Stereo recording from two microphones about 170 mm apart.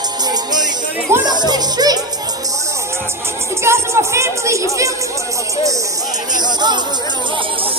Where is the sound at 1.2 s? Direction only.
25° right (ahead or behind).